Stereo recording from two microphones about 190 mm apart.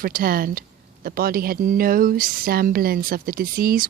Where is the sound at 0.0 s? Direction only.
50° right (ahead or behind).